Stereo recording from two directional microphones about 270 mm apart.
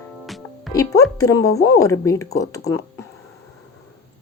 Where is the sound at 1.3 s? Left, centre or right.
Left.